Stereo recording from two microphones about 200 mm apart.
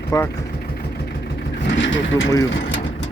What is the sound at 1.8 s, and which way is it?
Speech, 65° left (ahead or behind).